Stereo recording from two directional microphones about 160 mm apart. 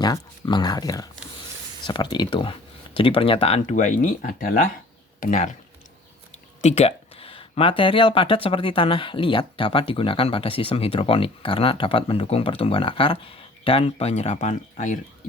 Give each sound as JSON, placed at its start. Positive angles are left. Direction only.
{"t": 0.0, "sound": "speech", "side_deg": 25}
{"t": 6.6, "sound": "speech", "side_deg": 40}